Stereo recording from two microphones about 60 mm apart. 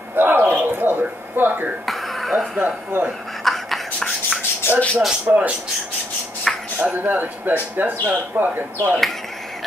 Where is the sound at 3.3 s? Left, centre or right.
Centre.